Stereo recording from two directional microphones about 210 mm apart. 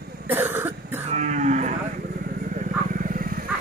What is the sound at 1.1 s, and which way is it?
Cattle, 35° right (ahead or behind).